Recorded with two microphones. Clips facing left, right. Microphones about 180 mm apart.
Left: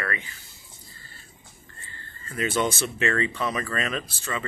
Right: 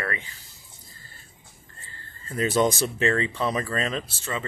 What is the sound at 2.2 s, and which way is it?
Speech, 35° right (ahead or behind).